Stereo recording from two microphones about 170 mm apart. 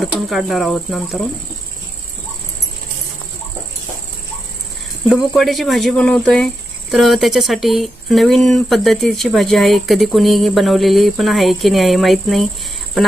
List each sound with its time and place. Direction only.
0.0 s speech: centre (ahead or behind)
5.3 s speech: centre (ahead or behind)